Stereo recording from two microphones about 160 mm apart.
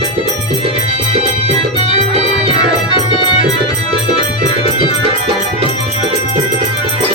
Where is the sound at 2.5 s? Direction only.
30° left (ahead or behind).